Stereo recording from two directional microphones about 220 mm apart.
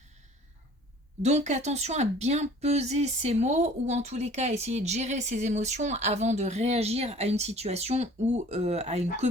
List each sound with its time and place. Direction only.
1.2 s speech: 30° right (ahead or behind)